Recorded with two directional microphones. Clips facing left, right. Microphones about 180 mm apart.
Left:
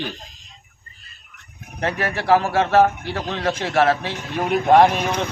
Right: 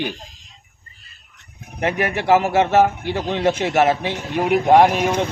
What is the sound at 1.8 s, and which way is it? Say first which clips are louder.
A man's voice: right 3 dB; 20° right (ahead or behind).